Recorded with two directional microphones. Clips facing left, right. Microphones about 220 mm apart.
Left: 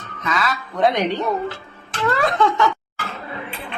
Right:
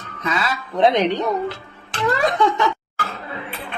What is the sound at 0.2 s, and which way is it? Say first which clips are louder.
Speech: even; 30° right (ahead or behind).